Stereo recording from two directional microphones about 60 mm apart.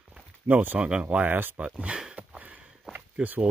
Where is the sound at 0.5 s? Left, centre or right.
Right.